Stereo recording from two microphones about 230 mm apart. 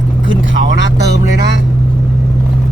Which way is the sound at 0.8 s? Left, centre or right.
Right.